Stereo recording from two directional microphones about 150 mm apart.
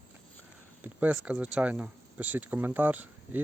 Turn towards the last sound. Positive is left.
turn(degrees=-10)  # may be behind; listen again after turning